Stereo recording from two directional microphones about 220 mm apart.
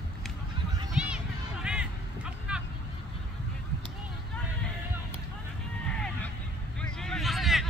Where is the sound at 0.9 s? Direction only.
5° right (ahead or behind).